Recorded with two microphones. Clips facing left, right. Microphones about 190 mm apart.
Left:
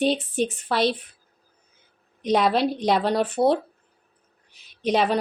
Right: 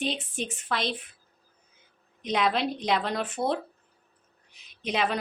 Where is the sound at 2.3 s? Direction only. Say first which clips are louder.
Left 6 dB; 40° left (ahead or behind).